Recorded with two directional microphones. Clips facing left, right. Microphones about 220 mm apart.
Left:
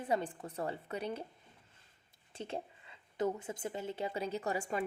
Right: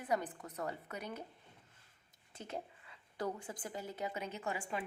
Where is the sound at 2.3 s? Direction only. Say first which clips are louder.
Left 4 dB; 30° left (ahead or behind).